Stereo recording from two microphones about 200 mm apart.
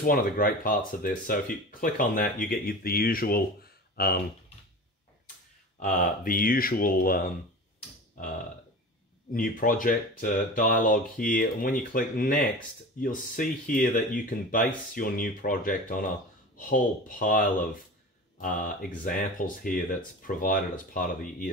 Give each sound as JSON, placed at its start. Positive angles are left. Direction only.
{"t": 0.0, "sound": "speech", "side_deg": 45}
{"t": 5.8, "sound": "speech", "side_deg": 40}
{"t": 9.3, "sound": "speech", "side_deg": 45}